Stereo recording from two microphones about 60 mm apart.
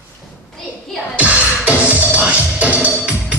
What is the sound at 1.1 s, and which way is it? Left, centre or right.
Music, right.